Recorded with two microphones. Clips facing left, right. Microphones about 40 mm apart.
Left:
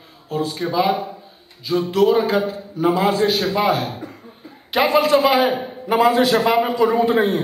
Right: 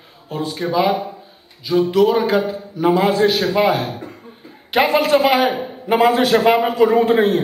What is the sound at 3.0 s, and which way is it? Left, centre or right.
Speech, right.